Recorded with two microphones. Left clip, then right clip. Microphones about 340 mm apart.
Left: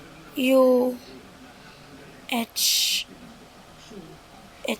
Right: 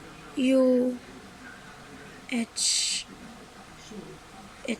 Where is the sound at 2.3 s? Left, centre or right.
Left.